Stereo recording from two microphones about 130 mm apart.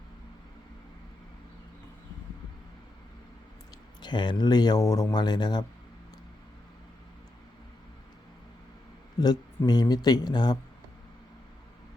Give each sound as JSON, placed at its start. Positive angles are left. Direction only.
{"t": 4.0, "sound": "speech", "side_deg": 35}
{"t": 9.2, "sound": "speech", "side_deg": 30}